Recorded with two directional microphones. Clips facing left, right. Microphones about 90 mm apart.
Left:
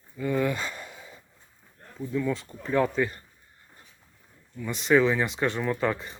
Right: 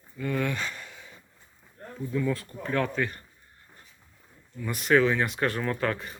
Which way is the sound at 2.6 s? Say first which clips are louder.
Left 3 dB; 10° left (ahead or behind).